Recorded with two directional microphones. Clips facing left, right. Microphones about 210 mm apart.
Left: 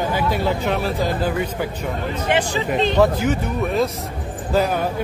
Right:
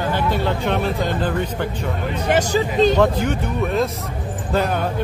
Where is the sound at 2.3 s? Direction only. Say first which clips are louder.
Right 3 dB; 40° right (ahead or behind).